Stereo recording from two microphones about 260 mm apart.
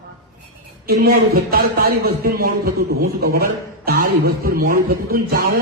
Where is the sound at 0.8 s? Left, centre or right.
Right.